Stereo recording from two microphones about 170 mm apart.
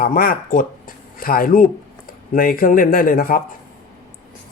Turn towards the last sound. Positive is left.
turn(degrees=60)  # may be behind; listen again after turning